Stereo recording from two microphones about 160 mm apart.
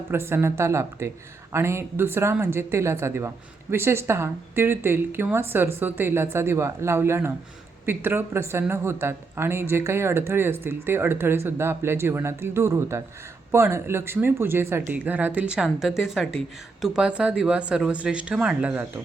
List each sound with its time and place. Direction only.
0.1 s speech: 15° right (ahead or behind)